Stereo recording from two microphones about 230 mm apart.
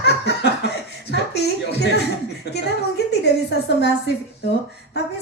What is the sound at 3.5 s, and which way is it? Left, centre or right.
Speech, left.